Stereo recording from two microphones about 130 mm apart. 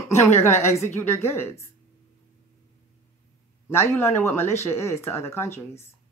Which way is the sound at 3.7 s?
20° left (ahead or behind).